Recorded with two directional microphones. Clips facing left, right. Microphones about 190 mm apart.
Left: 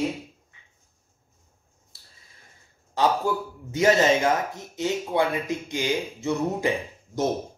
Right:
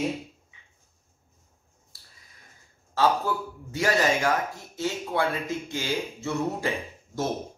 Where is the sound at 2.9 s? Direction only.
20° left (ahead or behind).